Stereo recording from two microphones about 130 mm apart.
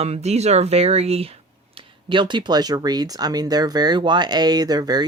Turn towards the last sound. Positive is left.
turn(degrees=-30)  # may be behind; listen again after turning